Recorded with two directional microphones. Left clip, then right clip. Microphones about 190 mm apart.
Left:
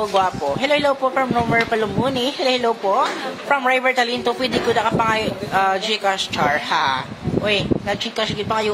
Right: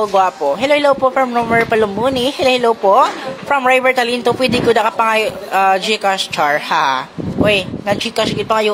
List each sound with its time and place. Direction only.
0.1 s speech: 20° right (ahead or behind)